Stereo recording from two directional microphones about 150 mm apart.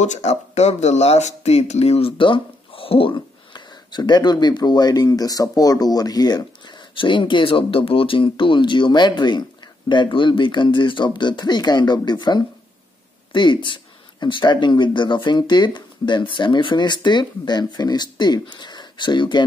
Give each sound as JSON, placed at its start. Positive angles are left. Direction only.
{"t": 0.0, "sound": "speech", "side_deg": 50}